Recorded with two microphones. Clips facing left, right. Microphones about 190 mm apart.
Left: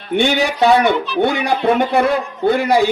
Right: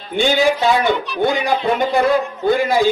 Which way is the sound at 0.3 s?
70° left (ahead or behind).